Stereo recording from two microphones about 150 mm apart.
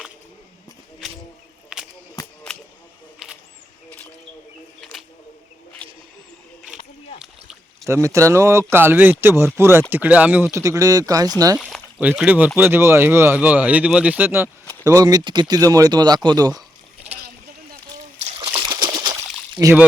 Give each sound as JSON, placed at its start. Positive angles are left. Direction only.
{"t": 3.2, "sound": "a sound", "side_deg": -5}
{"t": 4.8, "sound": "single-lens reflex camera", "side_deg": 0}
{"t": 7.9, "sound": "speech", "side_deg": -20}
{"t": 10.6, "sound": "speech", "side_deg": -20}
{"t": 11.5, "sound": "speech", "side_deg": -5}
{"t": 18.2, "sound": "a sound", "side_deg": -45}